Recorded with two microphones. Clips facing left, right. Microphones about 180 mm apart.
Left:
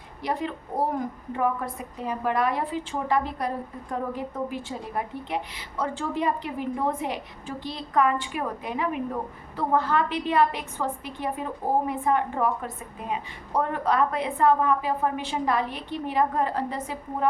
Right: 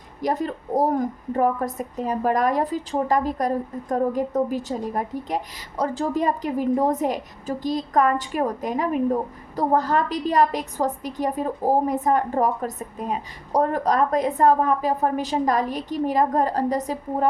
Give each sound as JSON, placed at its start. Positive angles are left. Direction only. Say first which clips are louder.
{"t": 0.2, "sound": "a woman's voice", "louder": "right 5 dB", "side_deg": -40}